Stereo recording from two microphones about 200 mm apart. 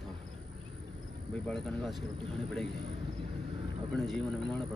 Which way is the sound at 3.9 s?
Centre (ahead or behind).